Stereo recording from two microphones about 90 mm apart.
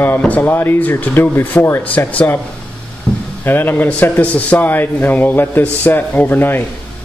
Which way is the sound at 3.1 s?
10° left (ahead or behind).